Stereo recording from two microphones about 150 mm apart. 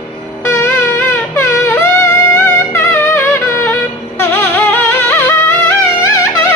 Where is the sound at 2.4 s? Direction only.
15° left (ahead or behind).